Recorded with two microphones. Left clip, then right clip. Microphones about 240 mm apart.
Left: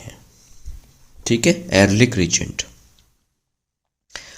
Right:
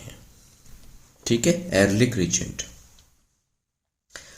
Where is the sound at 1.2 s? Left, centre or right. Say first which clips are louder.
Left 4 dB; left.